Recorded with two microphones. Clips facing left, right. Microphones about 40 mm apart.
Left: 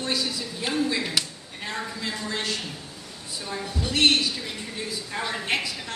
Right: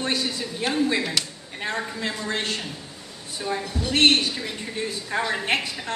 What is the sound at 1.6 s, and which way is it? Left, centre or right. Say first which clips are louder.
A woman's voice: right 4 dB; right.